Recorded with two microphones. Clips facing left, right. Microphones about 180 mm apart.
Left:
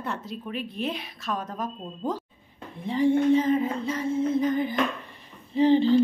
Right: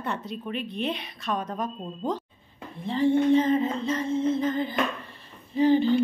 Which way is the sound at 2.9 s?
10° left (ahead or behind).